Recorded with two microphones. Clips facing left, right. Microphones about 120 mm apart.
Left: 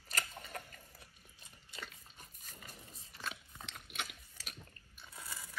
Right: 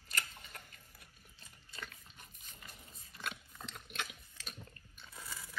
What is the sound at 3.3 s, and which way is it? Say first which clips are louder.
Pig: right 1 dB; centre (ahead or behind).